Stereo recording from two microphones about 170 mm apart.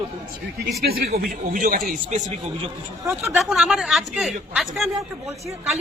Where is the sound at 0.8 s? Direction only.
65° right (ahead or behind).